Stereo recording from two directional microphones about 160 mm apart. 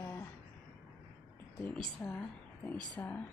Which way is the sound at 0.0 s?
15° left (ahead or behind).